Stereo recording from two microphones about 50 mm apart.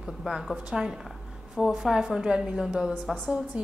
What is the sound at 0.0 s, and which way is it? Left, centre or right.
A woman's voice, centre.